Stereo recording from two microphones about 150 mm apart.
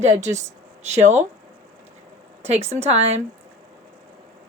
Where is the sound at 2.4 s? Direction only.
45° right (ahead or behind).